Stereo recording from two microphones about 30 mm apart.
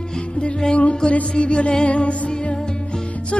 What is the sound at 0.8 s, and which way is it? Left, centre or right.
Music, left.